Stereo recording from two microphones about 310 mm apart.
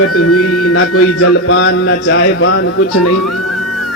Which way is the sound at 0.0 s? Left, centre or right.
Left.